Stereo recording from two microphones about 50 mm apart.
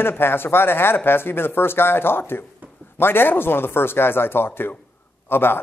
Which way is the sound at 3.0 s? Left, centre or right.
Left.